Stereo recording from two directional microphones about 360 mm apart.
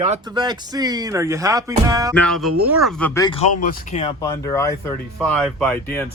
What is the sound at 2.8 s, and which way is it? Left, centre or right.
Speech, centre.